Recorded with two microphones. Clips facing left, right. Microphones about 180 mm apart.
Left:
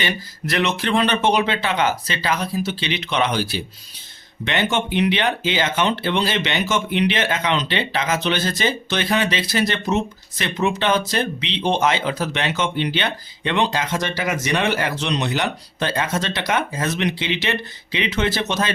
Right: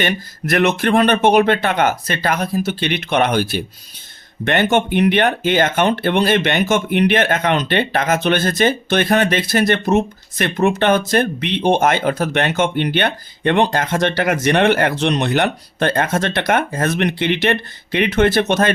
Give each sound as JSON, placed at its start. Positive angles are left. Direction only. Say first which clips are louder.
{"t": 0.0, "sound": "speech", "louder": "right 5 dB", "side_deg": -50}